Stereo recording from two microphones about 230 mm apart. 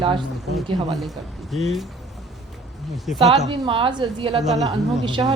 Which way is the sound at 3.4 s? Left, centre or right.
Centre.